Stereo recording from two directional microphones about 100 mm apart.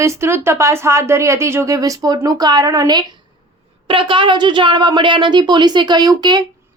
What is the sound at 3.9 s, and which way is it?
A woman's voice, 60° right (ahead or behind).